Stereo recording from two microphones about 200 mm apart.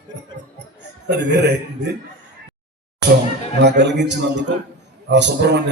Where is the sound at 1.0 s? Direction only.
60° right (ahead or behind).